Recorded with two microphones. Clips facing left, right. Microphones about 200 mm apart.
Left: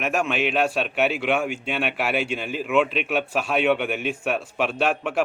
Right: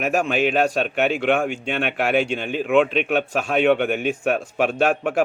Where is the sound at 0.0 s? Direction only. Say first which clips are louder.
Right 3 dB; 40° right (ahead or behind).